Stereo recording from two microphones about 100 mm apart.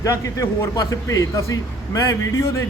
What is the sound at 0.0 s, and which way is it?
A man's voice, 30° left (ahead or behind).